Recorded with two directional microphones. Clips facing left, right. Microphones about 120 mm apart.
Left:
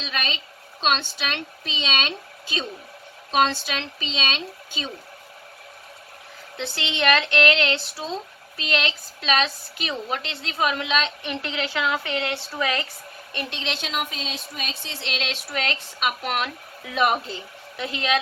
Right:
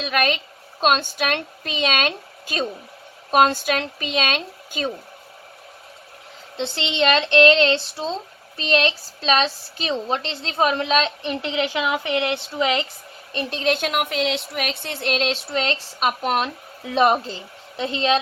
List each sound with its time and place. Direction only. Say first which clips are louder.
0.0 s a sound: right 9 dB; 55° right (ahead or behind)
0.8 s a woman's voice: right 5 dB; 45° right (ahead or behind)
6.6 s speech: right 4 dB; 25° right (ahead or behind)
11.4 s speech: right 3 dB; 20° right (ahead or behind)
13.5 s speech: right 11 dB; 45° right (ahead or behind)
15.3 s speech: right 5 dB; 30° right (ahead or behind)